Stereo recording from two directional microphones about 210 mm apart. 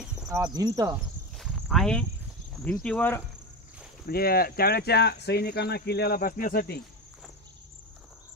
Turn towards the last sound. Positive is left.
turn(degrees=45)  # may be behind; listen again after turning